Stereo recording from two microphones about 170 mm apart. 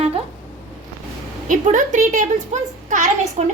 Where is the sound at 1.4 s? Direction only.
50° right (ahead or behind).